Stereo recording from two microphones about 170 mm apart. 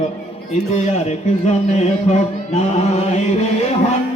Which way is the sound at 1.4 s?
40° left (ahead or behind).